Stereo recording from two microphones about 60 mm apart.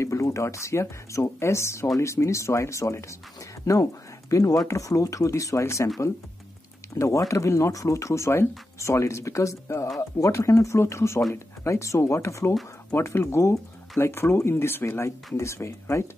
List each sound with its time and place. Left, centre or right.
0.0 s speech: left
7.0 s speech: left
12.9 s speech: left